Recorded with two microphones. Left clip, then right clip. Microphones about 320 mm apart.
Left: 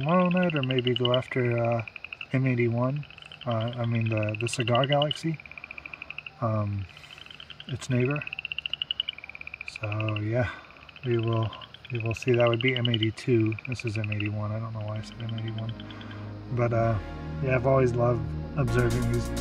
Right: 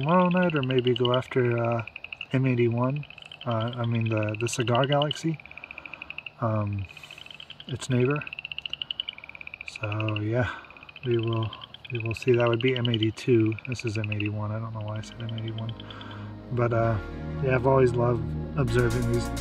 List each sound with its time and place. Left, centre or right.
0.0 s speech: centre
6.4 s speech: centre
7.9 s speech: centre
8.3 s a sound: right
9.8 s speech: centre
12.0 s speech: centre